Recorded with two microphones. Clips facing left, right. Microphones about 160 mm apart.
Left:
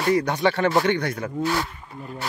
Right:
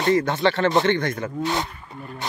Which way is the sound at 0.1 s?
15° left (ahead or behind).